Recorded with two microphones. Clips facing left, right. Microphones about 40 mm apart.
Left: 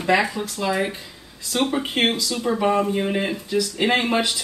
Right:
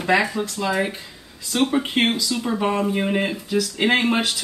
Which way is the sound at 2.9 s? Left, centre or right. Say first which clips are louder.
Right 1 dB; centre.